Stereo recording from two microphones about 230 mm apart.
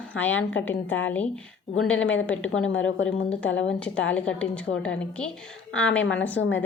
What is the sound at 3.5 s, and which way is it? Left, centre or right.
Speech, left.